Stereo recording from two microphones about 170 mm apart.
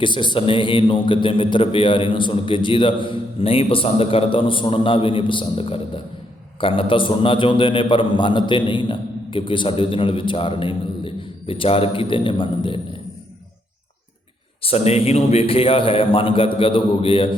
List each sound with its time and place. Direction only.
0.0 s a man's voice: 25° left (ahead or behind)
14.6 s a man's voice: 35° left (ahead or behind)